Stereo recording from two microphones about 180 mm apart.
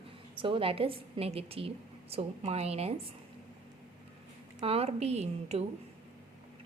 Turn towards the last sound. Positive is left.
turn(degrees=-35)  # may be behind; listen again after turning